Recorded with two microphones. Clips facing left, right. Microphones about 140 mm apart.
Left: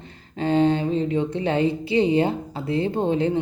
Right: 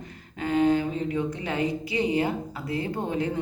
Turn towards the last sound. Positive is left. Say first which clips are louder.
# left 6 dB
turn(degrees=25)  # may be behind; listen again after turning